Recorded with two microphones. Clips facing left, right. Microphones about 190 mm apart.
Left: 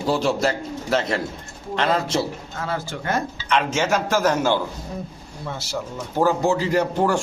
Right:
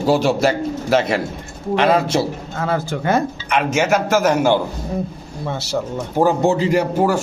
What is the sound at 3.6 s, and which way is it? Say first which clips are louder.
Speech: right 5 dB; 10° right (ahead or behind).